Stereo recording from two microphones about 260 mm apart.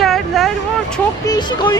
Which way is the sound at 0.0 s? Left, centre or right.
Centre.